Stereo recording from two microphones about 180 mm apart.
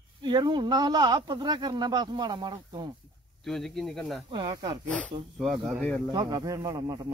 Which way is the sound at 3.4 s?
Centre (ahead or behind).